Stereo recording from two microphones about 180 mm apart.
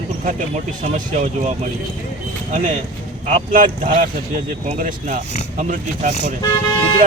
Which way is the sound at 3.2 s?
50° right (ahead or behind).